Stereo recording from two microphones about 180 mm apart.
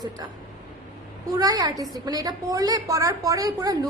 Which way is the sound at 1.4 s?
20° right (ahead or behind).